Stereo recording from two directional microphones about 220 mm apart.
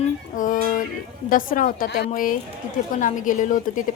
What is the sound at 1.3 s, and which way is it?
Speech, 40° left (ahead or behind).